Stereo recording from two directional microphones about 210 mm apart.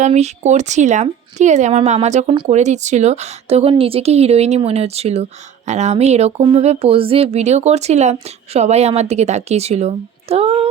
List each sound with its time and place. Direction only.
0.0 s a woman's voice: 35° right (ahead or behind)